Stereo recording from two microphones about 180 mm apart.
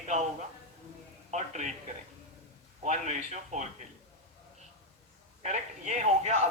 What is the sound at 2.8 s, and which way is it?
Speech, 40° right (ahead or behind).